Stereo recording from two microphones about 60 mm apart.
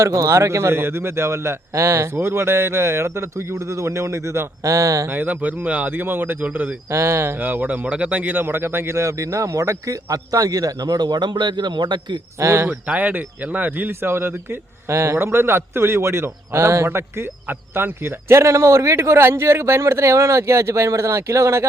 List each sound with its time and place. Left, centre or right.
0.0 s a man's voice: right
5.0 s speech: right
5.9 s speech: right
6.9 s a man's voice: right
12.4 s a man's voice: right
12.8 s a man's voice: right